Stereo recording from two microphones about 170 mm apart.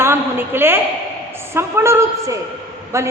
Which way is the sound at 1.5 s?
15° right (ahead or behind).